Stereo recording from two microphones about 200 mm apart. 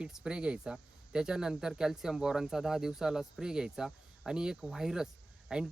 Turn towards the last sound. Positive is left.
turn(degrees=-5)  # may be behind; listen again after turning